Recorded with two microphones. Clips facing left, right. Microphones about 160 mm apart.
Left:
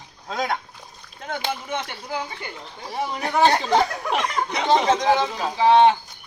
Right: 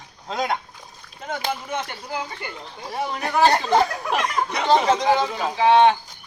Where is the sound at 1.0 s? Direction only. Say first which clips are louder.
Right 1 dB; 5° right (ahead or behind).